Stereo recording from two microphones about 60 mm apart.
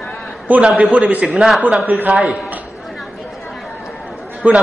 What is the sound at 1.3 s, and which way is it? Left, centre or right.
Speech, centre.